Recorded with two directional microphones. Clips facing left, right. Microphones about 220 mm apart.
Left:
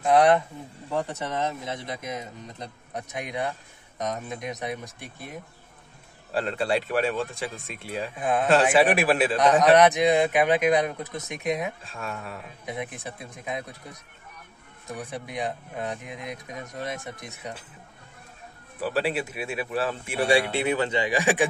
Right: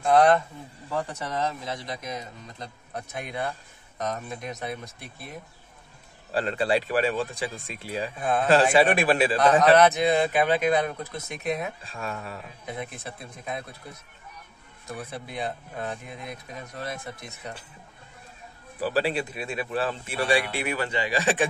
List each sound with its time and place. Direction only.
0.0 s speech: 15° left (ahead or behind)
6.3 s speech: centre (ahead or behind)
8.2 s speech: 15° left (ahead or behind)
9.8 s speech: 15° left (ahead or behind)
11.8 s speech: centre (ahead or behind)
12.6 s speech: 15° left (ahead or behind)
14.9 s speech: 15° left (ahead or behind)
18.8 s speech: centre (ahead or behind)
20.2 s speech: 20° left (ahead or behind)